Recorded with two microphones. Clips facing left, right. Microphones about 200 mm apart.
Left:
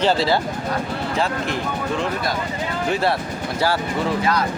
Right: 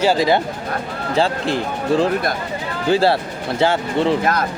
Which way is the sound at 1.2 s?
30° right (ahead or behind).